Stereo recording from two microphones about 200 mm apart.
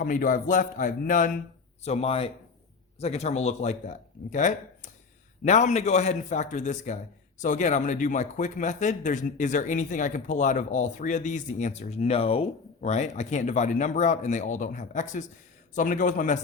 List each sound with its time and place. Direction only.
0.0 s a man's voice: 45° left (ahead or behind)